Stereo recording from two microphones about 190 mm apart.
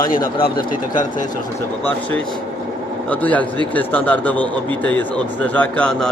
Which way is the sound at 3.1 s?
10° left (ahead or behind).